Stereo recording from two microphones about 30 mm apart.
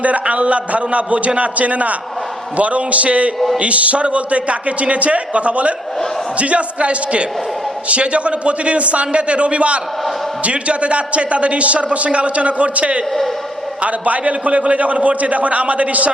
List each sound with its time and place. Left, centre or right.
0.0 s a man's voice: right
13.8 s a man's voice: right